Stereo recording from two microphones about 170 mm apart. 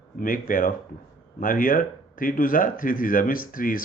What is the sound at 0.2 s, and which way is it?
Speech, 55° left (ahead or behind).